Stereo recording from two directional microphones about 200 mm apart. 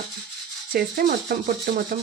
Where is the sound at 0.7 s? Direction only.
50° right (ahead or behind).